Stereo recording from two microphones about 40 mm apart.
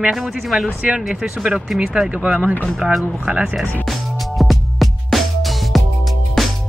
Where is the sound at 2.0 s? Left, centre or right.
Right.